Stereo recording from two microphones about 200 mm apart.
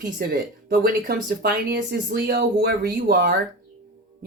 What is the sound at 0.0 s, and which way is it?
Speech, 45° right (ahead or behind).